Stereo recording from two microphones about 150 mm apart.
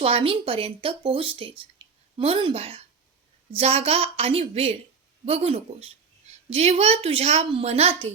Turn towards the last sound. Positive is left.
turn(degrees=-45)  # may be behind; listen again after turning